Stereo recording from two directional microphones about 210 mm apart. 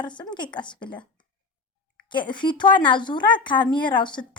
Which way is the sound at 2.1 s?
20° left (ahead or behind).